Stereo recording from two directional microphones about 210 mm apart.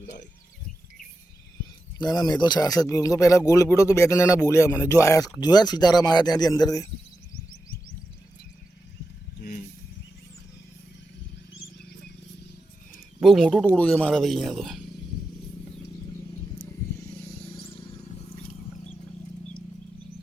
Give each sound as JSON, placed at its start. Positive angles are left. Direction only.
{"t": 2.0, "sound": "speech", "side_deg": 20}
{"t": 9.4, "sound": "a sound", "side_deg": 40}
{"t": 13.1, "sound": "speech", "side_deg": 0}